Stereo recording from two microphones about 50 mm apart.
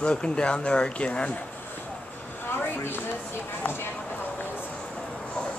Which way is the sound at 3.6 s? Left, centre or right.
Left.